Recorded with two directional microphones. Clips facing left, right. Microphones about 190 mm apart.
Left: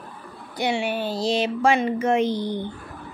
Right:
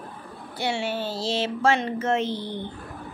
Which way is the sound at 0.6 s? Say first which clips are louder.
Left 3 dB; 15° left (ahead or behind).